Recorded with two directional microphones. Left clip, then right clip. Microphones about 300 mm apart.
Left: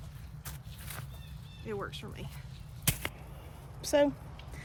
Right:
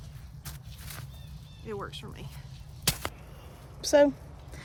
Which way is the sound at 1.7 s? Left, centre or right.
Centre.